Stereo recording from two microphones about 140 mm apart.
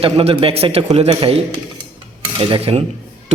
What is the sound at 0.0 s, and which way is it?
Speech, 40° right (ahead or behind).